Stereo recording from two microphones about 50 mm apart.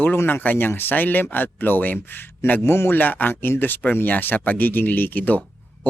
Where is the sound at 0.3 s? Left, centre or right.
Left.